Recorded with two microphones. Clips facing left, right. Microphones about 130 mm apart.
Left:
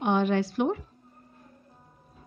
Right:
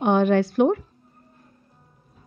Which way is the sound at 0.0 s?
50° right (ahead or behind).